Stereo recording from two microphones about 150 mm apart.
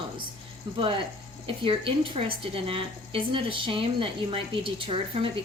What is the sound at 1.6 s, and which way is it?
A woman's voice, 35° right (ahead or behind).